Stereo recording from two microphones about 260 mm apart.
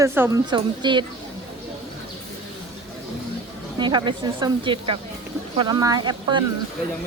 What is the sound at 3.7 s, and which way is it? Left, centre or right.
A woman's voice, centre.